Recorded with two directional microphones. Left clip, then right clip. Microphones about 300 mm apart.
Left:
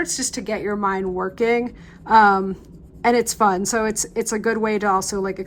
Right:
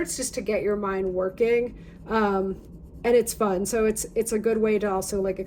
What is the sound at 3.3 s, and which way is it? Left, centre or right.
A woman's voice, left.